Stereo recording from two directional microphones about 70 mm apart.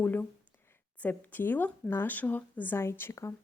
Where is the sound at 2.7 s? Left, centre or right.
Left.